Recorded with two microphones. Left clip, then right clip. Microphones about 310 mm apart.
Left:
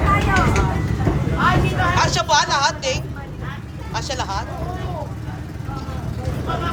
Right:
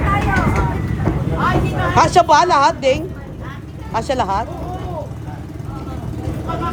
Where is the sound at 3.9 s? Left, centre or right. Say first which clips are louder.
Right 7 dB; right.